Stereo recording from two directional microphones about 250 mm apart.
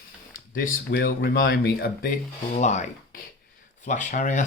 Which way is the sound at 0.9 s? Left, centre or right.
Left.